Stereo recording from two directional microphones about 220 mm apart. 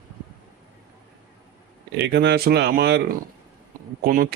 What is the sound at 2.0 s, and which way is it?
Speech, 50° right (ahead or behind).